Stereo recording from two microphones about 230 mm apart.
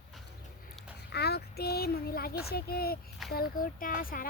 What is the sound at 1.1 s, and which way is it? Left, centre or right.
A child's voice, left.